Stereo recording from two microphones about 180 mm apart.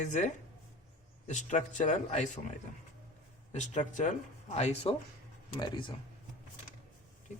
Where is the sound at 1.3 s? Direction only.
40° left (ahead or behind).